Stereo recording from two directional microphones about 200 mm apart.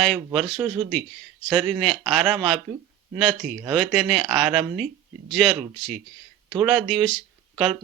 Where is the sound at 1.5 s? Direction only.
Centre (ahead or behind).